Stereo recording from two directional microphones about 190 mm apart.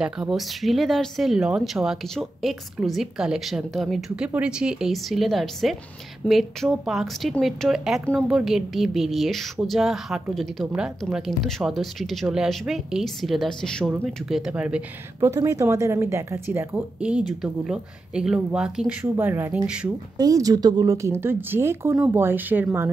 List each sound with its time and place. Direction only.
0.0 s speech: 5° right (ahead or behind)
15.1 s speech: 15° right (ahead or behind)
20.2 s speech: 20° right (ahead or behind)